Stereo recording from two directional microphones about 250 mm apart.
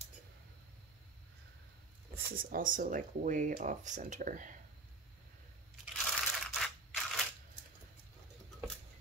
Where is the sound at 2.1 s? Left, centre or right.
Right.